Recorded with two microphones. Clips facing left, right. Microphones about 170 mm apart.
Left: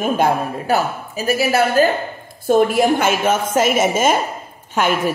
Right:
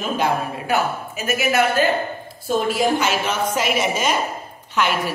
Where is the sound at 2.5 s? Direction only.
55° left (ahead or behind).